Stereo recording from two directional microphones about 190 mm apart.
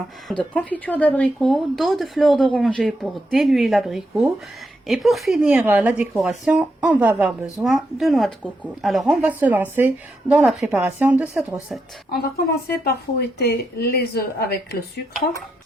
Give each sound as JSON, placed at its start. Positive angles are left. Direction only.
{"t": 0.3, "sound": "a woman's voice", "side_deg": 5}
{"t": 12.1, "sound": "speech", "side_deg": 55}